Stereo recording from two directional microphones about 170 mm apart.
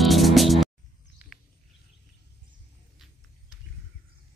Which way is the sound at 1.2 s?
10° right (ahead or behind).